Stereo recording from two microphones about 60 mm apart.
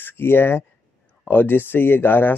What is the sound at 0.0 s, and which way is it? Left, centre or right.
Speech, left.